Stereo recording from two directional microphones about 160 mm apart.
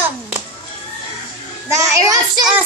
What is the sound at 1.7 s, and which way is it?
Speech, 20° right (ahead or behind).